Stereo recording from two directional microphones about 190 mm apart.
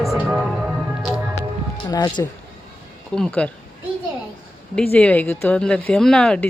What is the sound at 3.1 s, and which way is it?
Speech, 5° left (ahead or behind).